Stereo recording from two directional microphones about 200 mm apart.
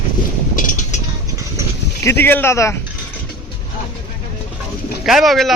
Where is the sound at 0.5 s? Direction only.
40° left (ahead or behind).